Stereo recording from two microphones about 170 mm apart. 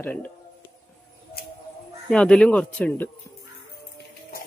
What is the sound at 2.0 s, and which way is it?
Speech, 5° left (ahead or behind).